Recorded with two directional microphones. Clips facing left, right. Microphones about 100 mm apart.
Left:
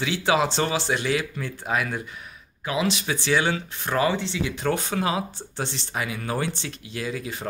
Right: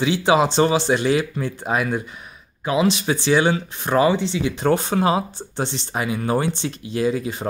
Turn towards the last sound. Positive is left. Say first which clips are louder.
# right 9 dB
turn(degrees=-30)  # may be behind; listen again after turning